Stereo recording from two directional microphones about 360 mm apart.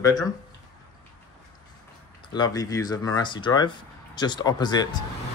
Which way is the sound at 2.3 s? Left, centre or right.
Centre.